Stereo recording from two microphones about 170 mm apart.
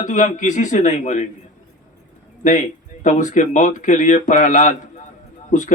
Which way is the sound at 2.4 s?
45° left (ahead or behind).